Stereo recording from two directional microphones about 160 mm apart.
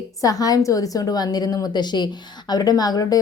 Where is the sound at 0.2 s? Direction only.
20° left (ahead or behind).